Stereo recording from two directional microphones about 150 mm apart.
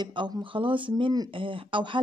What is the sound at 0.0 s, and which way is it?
Speech, 30° right (ahead or behind).